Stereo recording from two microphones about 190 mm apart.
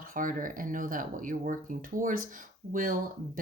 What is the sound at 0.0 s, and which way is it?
Speech, 45° right (ahead or behind).